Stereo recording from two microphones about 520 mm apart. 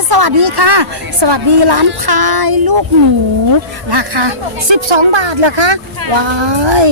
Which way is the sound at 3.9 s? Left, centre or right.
Right.